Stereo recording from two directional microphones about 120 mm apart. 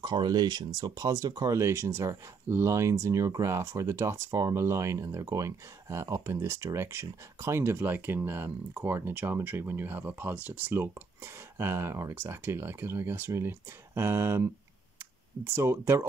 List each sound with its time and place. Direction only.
0.0 s speech: 35° right (ahead or behind)